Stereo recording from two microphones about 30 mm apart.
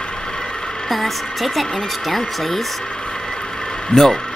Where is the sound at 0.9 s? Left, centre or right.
Centre.